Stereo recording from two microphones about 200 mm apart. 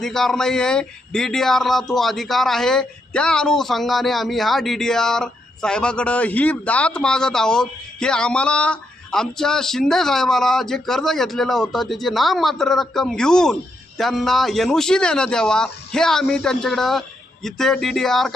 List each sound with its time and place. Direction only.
0.0 s speech: centre (ahead or behind)